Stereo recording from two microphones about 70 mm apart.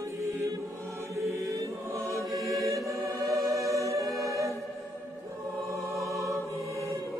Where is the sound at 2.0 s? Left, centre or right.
Centre.